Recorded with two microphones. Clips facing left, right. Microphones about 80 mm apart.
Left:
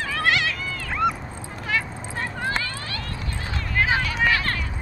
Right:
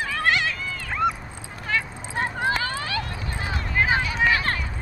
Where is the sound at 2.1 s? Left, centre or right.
Centre.